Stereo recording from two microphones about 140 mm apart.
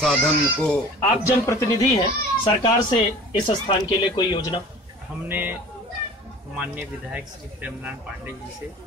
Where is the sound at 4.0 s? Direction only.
35° left (ahead or behind).